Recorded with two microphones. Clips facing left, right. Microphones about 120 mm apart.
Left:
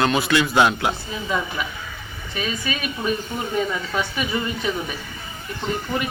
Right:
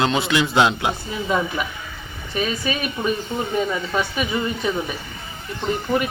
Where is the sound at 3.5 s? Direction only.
5° right (ahead or behind).